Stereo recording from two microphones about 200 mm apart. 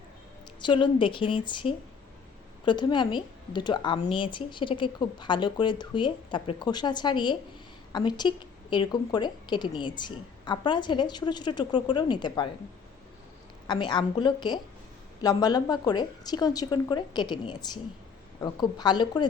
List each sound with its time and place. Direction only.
0.6 s a woman's voice: 25° left (ahead or behind)
13.7 s a woman's voice: 20° left (ahead or behind)